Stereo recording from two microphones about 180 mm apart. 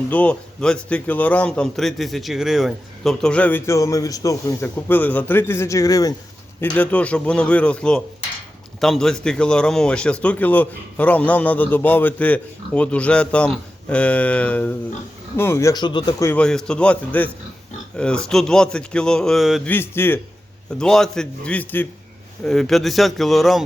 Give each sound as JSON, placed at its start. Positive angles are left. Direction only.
{"t": 0.1, "sound": "a man's voice", "side_deg": 5}
{"t": 6.6, "sound": "a man's voice", "side_deg": 10}
{"t": 16.2, "sound": "a man's voice", "side_deg": 5}
{"t": 19.7, "sound": "a man's voice", "side_deg": 10}